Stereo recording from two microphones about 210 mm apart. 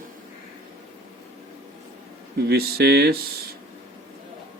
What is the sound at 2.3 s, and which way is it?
Speech, 50° right (ahead or behind).